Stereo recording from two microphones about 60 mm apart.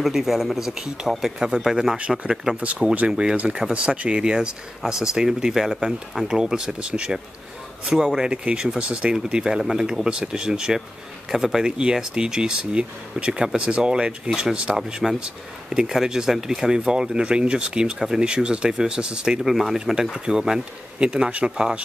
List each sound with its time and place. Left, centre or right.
0.0 s speech: centre